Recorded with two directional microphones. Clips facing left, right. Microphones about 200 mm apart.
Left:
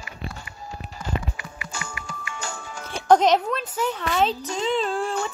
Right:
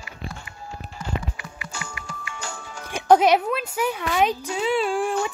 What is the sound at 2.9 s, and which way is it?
Speech, 10° right (ahead or behind).